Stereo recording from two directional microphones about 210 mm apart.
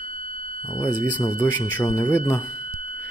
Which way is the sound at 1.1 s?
10° left (ahead or behind).